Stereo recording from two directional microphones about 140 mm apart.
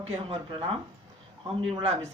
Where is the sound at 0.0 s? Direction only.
45° right (ahead or behind).